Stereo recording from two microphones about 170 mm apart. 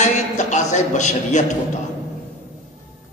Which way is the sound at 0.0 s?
45° left (ahead or behind).